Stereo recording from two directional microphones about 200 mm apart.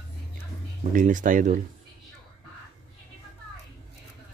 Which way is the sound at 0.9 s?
40° right (ahead or behind).